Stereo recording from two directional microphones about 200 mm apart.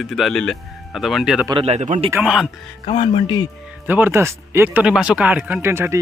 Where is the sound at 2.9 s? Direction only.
25° left (ahead or behind).